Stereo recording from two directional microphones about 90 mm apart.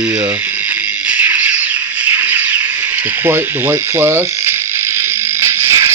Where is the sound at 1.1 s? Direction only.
15° right (ahead or behind).